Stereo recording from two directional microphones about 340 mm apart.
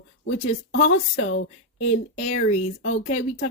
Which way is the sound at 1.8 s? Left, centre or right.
Centre.